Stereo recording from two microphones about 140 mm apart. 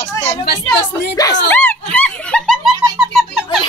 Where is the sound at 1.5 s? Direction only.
10° left (ahead or behind).